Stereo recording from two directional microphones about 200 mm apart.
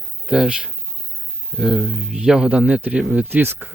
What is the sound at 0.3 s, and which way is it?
Speech, 5° right (ahead or behind).